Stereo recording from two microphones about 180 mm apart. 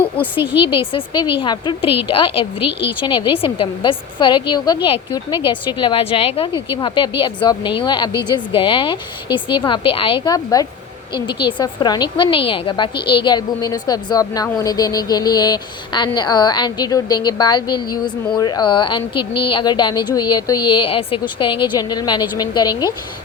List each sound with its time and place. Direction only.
0.5 s a woman's voice: 30° left (ahead or behind)